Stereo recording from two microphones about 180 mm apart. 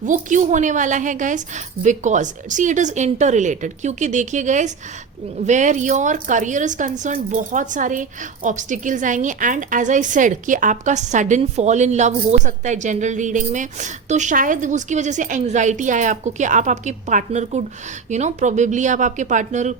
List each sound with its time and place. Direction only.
0.0 s a woman's voice: 45° right (ahead or behind)